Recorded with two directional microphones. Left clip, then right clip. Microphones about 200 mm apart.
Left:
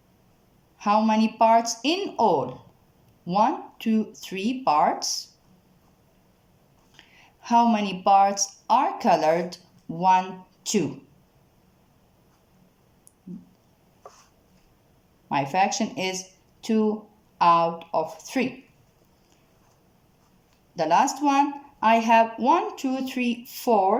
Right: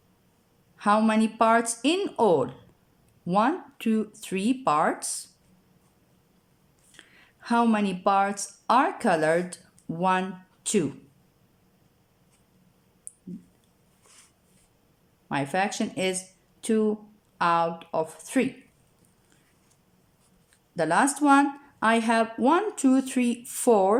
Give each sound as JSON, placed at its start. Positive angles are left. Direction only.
{"t": 0.8, "sound": "a woman's voice", "side_deg": -20}
{"t": 7.4, "sound": "a woman's voice", "side_deg": -20}
{"t": 15.3, "sound": "speech", "side_deg": -15}
{"t": 20.7, "sound": "a woman's voice", "side_deg": -20}